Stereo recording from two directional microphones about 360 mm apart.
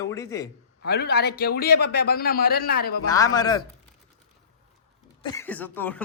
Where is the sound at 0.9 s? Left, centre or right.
Left.